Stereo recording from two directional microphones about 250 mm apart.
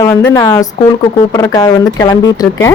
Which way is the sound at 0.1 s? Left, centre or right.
Centre.